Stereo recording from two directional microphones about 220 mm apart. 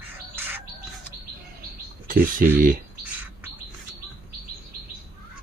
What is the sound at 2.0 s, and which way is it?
Speech, 40° right (ahead or behind).